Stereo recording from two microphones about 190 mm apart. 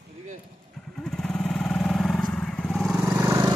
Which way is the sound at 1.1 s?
5° left (ahead or behind).